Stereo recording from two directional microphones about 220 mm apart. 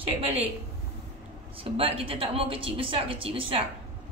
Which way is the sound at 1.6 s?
25° right (ahead or behind).